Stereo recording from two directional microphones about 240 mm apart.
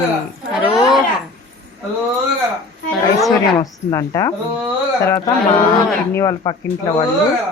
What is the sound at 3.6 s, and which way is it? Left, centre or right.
A woman's voice, centre.